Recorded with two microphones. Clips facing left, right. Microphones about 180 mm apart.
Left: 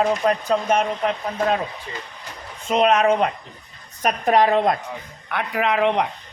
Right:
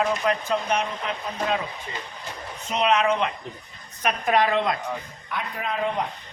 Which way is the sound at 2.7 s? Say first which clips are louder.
Left 5 dB; 50° left (ahead or behind).